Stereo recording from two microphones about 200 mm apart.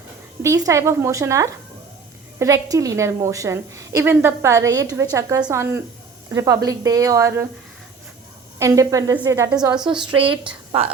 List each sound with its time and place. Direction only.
0.4 s a woman's voice: 15° right (ahead or behind)
8.5 s a woman's voice: 15° right (ahead or behind)
9.7 s a woman's voice: 5° right (ahead or behind)
10.0 s a woman's voice: 25° right (ahead or behind)